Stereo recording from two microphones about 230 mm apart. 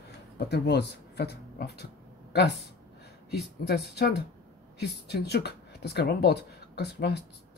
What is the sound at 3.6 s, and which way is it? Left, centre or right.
Speech, left.